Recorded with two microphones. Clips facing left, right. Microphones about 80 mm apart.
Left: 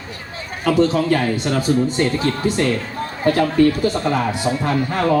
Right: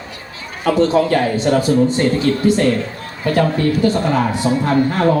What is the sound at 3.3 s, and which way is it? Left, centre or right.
Speech, left.